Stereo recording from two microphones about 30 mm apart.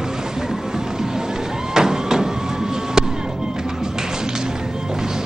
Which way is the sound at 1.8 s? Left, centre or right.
Right.